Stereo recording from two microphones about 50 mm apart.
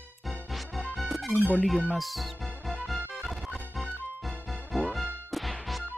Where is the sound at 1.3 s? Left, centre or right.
Left.